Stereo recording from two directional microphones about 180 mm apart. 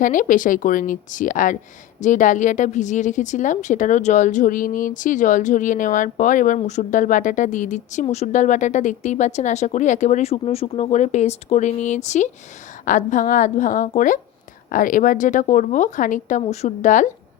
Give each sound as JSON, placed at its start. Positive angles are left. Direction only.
{"t": 0.0, "sound": "a woman's voice", "side_deg": 50}